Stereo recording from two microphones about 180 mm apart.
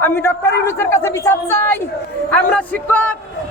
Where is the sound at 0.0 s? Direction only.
15° left (ahead or behind).